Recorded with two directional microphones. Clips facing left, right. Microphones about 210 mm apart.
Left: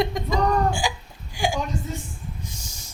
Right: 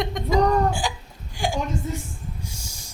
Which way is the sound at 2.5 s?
10° right (ahead or behind).